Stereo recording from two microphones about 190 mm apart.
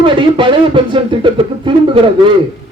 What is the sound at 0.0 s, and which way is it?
Speech, 25° right (ahead or behind).